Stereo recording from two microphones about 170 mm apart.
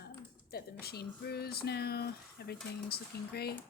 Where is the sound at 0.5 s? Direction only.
65° left (ahead or behind).